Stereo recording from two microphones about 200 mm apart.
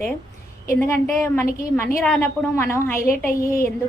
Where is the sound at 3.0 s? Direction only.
45° left (ahead or behind).